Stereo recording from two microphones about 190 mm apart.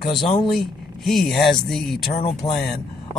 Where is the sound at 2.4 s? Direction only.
20° left (ahead or behind).